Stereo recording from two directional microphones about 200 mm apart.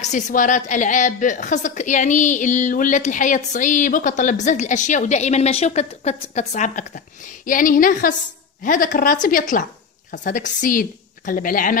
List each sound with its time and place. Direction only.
0.0 s a woman's voice: 40° left (ahead or behind)